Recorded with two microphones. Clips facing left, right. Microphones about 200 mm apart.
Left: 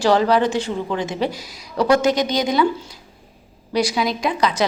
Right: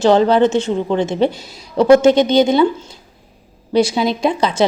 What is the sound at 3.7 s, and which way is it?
Speech, 25° right (ahead or behind).